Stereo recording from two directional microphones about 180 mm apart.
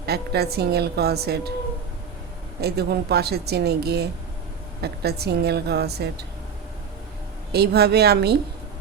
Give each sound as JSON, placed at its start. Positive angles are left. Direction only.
{"t": 0.0, "sound": "a woman's voice", "side_deg": -60}
{"t": 2.6, "sound": "a woman's voice", "side_deg": -60}
{"t": 7.5, "sound": "a woman's voice", "side_deg": -65}